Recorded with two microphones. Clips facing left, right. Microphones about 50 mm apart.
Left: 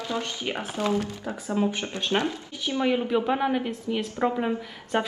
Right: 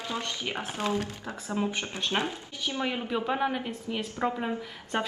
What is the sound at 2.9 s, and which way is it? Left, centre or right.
Speech, centre.